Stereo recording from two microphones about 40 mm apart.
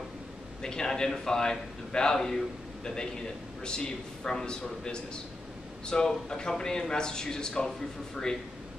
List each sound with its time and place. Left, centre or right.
0.6 s a man's voice: centre